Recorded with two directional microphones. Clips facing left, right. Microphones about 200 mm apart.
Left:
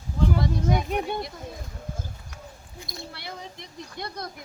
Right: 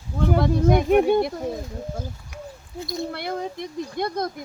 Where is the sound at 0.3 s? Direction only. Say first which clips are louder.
Right 8 dB; 55° right (ahead or behind).